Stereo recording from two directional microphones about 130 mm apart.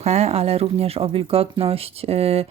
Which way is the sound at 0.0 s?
55° right (ahead or behind).